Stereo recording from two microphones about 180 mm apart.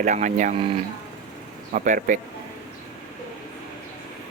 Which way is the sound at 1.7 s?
45° right (ahead or behind).